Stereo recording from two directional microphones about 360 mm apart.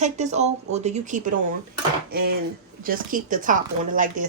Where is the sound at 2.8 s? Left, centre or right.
Right.